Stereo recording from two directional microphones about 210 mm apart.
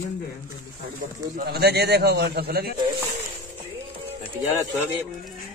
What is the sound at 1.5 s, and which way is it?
A man's voice, 50° right (ahead or behind).